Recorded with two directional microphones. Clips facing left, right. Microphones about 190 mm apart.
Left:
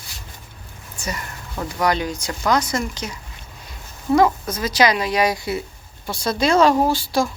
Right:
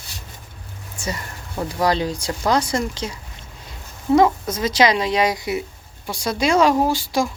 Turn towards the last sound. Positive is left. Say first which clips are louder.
# left 1 dB
turn(degrees=-15)  # may be behind; listen again after turning